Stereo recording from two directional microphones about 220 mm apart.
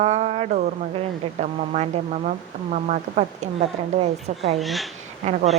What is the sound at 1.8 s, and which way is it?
Speech, 35° right (ahead or behind).